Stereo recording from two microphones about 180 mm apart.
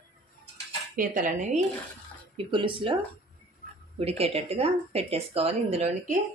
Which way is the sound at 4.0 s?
35° right (ahead or behind).